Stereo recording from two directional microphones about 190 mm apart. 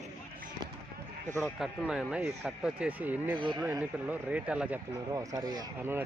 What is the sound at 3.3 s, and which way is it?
Speech, 25° right (ahead or behind).